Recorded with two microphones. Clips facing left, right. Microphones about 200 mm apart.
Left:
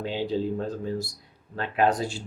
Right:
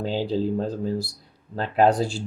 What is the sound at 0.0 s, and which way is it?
Speech, 40° right (ahead or behind).